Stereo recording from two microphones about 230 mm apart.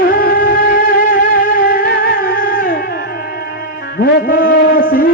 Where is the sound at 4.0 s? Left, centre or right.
Left.